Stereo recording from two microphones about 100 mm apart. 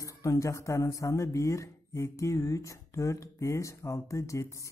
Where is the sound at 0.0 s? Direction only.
35° left (ahead or behind).